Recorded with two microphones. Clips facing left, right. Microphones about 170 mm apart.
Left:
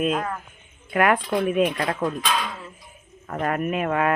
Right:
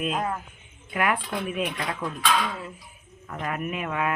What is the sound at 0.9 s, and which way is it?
Speech, 50° left (ahead or behind).